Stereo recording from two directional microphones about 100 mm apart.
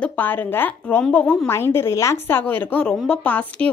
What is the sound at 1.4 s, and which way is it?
A woman's voice, 25° left (ahead or behind).